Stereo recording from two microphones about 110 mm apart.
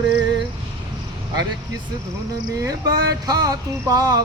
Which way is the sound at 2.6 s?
35° right (ahead or behind).